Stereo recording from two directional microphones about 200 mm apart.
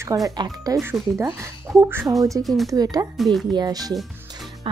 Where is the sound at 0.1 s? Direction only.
20° right (ahead or behind).